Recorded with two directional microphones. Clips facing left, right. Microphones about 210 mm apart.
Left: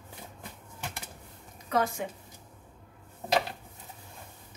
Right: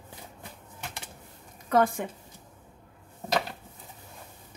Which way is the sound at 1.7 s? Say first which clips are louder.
Right 5 dB; 50° right (ahead or behind).